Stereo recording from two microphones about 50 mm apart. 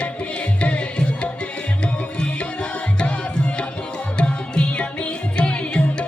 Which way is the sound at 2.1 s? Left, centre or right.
Centre.